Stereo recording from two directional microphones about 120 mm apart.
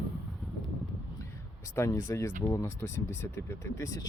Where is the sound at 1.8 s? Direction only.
25° left (ahead or behind).